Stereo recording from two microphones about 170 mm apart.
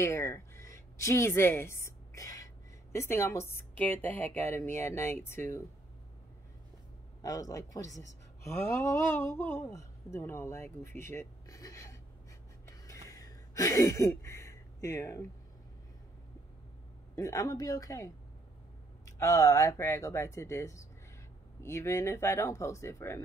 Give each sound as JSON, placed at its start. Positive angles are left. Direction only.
{"t": 0.0, "sound": "a woman's voice", "side_deg": 15}
{"t": 7.2, "sound": "a woman's voice", "side_deg": 20}
{"t": 12.6, "sound": "a sound", "side_deg": 20}
{"t": 17.1, "sound": "a woman's voice", "side_deg": 20}